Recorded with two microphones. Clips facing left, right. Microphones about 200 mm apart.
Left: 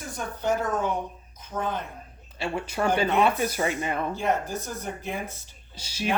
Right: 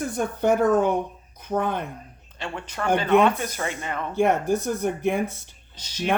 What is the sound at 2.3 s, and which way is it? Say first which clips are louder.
Speech: left 3 dB; 10° left (ahead or behind).